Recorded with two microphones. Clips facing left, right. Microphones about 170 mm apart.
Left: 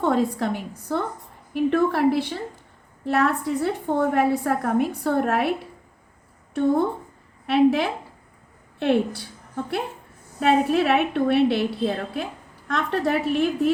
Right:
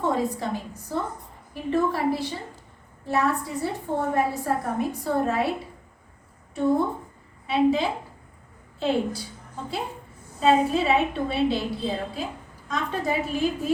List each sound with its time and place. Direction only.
0.0 s a woman's voice: 70° left (ahead or behind)
7.4 s a woman's voice: 70° left (ahead or behind)
10.4 s a woman's voice: 65° left (ahead or behind)